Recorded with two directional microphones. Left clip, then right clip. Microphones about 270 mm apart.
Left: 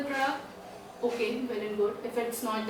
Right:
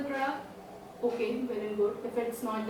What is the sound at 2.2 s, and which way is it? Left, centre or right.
Speech, centre.